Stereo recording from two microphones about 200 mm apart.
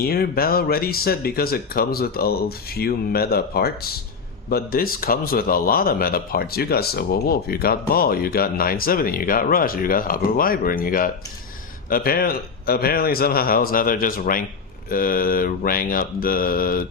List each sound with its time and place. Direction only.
0.0 s speech: 50° left (ahead or behind)